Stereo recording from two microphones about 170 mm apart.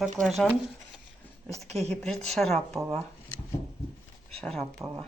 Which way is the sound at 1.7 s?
40° right (ahead or behind).